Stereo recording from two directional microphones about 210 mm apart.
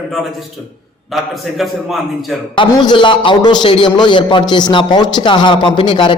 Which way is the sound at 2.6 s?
20° left (ahead or behind).